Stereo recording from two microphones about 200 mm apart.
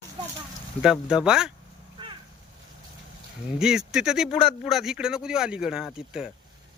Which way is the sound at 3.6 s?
5° right (ahead or behind).